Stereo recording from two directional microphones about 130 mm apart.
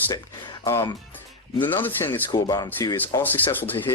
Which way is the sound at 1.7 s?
15° left (ahead or behind).